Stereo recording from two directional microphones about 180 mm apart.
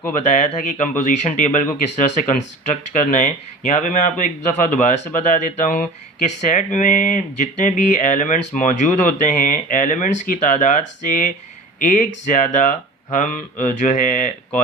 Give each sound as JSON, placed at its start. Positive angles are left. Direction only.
{"t": 0.2, "sound": "speech", "side_deg": 45}